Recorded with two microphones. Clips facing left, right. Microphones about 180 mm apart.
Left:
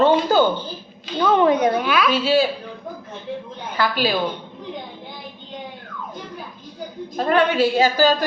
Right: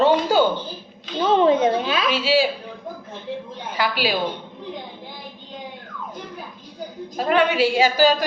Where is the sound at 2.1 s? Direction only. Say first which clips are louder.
Even; 10° right (ahead or behind).